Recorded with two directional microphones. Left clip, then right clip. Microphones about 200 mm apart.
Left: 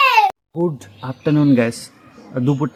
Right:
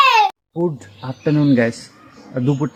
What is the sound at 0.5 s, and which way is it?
Speech, centre (ahead or behind).